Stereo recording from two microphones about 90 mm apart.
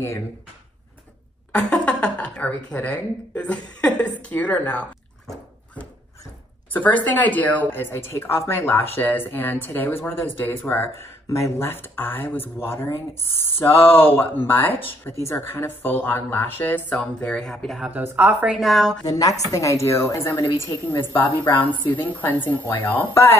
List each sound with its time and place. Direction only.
1.5 s speech: 10° left (ahead or behind)
6.7 s a woman's voice: 20° left (ahead or behind)
17.2 s speech: 10° left (ahead or behind)
17.9 s a woman's voice: 20° right (ahead or behind)
18.6 s speech: centre (ahead or behind)
19.0 s a woman's voice: 40° left (ahead or behind); by 23.1 s 20° left (ahead or behind)